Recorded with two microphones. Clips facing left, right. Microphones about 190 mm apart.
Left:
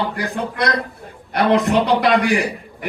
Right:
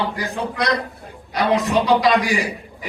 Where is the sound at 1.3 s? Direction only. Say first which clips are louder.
Left 3 dB; 60° left (ahead or behind).